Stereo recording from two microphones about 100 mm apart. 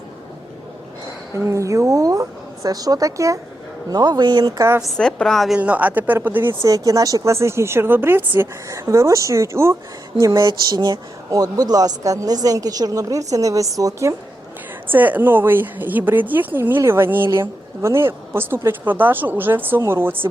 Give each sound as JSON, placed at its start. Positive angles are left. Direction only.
{"t": 1.5, "sound": "a woman's voice", "side_deg": -30}
{"t": 4.5, "sound": "speech", "side_deg": -30}
{"t": 4.8, "sound": "a woman's voice", "side_deg": 5}
{"t": 5.5, "sound": "speech", "side_deg": -15}
{"t": 8.8, "sound": "a woman's voice", "side_deg": -35}
{"t": 14.8, "sound": "speech", "side_deg": -20}